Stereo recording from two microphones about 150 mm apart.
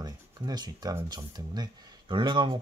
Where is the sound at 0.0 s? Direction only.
25° right (ahead or behind).